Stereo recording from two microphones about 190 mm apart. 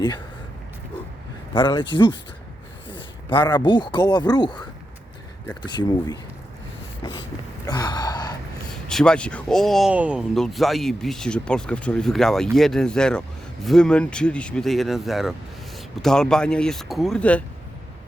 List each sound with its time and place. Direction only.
1.5 s speech: 25° left (ahead or behind)
5.6 s speech: 25° left (ahead or behind)
7.7 s gasp: 20° left (ahead or behind)
8.9 s speech: 5° left (ahead or behind)